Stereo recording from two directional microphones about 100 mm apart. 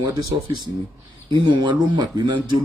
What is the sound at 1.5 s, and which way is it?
Speech, 50° right (ahead or behind).